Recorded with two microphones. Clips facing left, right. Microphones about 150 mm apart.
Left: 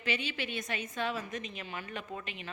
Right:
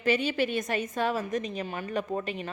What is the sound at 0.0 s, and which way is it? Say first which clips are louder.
A woman's voice: right 10 dB; 45° right (ahead or behind).